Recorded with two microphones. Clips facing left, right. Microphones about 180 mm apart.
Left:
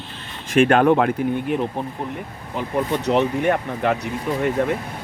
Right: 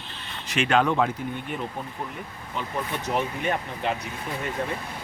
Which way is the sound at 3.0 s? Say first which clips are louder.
Left 8 dB; 70° left (ahead or behind).